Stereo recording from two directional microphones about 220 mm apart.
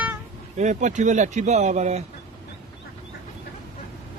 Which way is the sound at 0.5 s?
35° right (ahead or behind).